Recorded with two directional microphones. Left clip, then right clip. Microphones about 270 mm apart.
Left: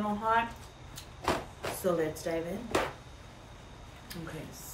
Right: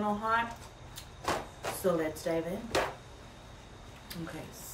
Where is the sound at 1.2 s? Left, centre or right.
Left.